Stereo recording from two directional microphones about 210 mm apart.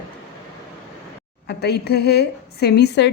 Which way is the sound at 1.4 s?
50° left (ahead or behind).